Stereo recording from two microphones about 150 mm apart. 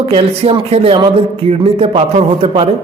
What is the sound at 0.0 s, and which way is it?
A man's voice, 40° right (ahead or behind).